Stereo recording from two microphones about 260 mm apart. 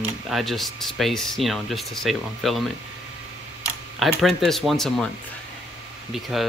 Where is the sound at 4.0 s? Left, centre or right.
Centre.